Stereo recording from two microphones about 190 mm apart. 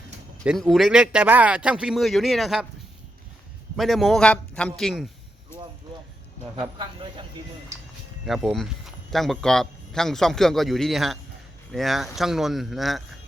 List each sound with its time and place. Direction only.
0.4 s speech: centre (ahead or behind)
3.8 s speech: centre (ahead or behind)
6.7 s speech: 25° right (ahead or behind)
8.2 s speech: 5° right (ahead or behind)